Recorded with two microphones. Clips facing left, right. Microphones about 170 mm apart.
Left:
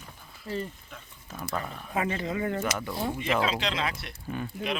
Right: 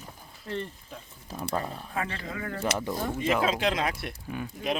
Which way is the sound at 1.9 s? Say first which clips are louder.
Left 7 dB; 20° left (ahead or behind).